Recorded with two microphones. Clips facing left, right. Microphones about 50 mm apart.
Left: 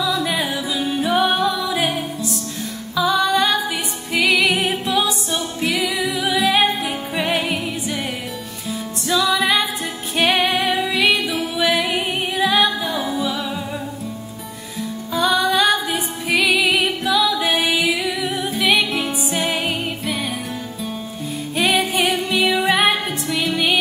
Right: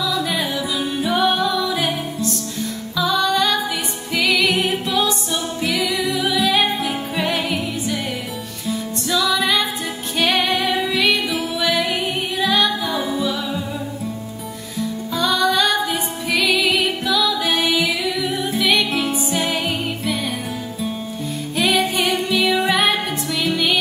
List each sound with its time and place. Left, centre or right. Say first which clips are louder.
0.0 s music: left 1 dB; centre
9.1 s music: left 1 dB; centre
15.1 s music: left 1 dB; centre
21.5 s music: even; centre